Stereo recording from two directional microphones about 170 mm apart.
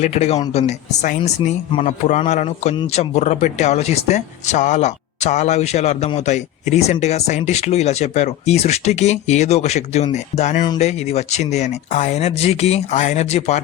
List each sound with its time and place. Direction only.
0.0 s a man's voice: 40° left (ahead or behind)